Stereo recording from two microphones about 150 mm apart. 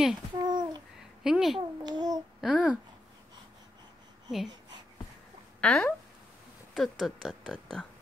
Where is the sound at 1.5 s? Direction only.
30° right (ahead or behind).